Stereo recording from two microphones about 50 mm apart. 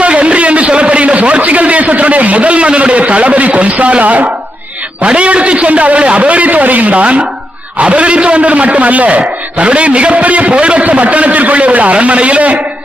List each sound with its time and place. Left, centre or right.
0.0 s a man's voice: right